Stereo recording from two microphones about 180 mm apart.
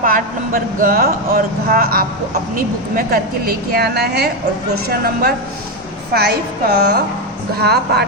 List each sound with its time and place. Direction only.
0.0 s a woman's voice: 50° right (ahead or behind)